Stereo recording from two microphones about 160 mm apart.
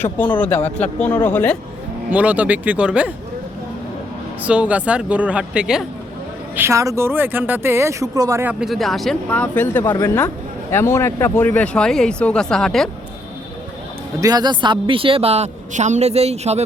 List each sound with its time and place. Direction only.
0.3 s speech: 10° left (ahead or behind)
2.0 s speech: 10° right (ahead or behind)
4.4 s speech: 10° right (ahead or behind)
6.6 s speech: 20° right (ahead or behind)
8.6 s speech: centre (ahead or behind)
14.2 s a woman's voice: 25° right (ahead or behind); by 16.6 s 40° right (ahead or behind)